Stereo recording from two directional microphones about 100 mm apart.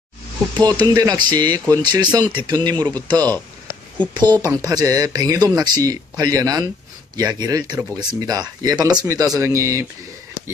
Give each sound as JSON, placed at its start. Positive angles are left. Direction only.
{"t": 0.6, "sound": "speech", "side_deg": -45}